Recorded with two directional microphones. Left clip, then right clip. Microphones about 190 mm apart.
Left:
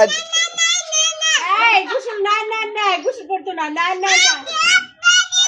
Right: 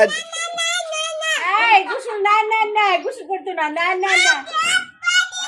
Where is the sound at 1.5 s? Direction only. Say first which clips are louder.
Right 1 dB; 20° right (ahead or behind).